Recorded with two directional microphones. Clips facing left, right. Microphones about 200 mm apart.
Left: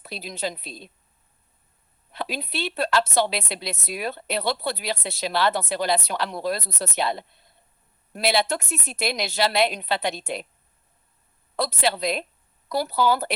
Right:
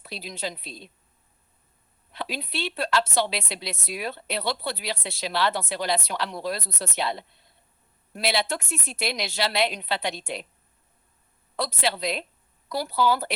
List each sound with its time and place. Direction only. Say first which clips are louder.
0.0 s a woman's voice: left 3 dB; 50° left (ahead or behind)
2.1 s a woman's voice: left 2 dB; 50° left (ahead or behind)
11.5 s a woman's voice: left 3 dB; 45° left (ahead or behind)